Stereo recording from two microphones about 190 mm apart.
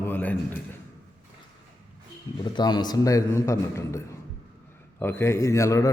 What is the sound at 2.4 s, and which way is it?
A man's voice, 20° left (ahead or behind).